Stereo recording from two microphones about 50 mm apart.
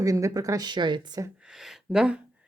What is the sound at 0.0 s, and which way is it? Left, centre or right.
Speech, right.